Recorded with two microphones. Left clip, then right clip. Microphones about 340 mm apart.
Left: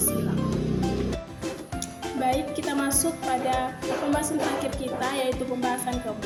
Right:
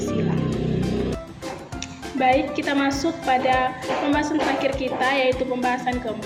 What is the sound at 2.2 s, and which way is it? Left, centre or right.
Music, left.